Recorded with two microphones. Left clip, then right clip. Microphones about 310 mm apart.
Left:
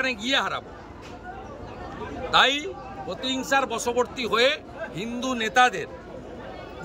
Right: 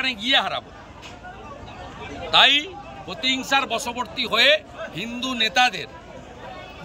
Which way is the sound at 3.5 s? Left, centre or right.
Centre.